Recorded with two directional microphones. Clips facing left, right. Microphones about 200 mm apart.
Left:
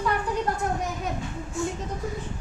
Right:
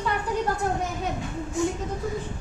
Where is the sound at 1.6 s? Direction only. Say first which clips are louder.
Right 4 dB; 15° right (ahead or behind).